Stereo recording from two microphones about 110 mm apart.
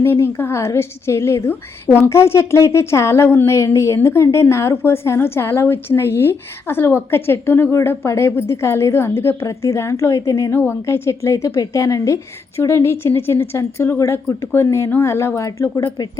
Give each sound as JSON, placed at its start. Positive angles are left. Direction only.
{"t": 0.0, "sound": "a woman's voice", "side_deg": 20}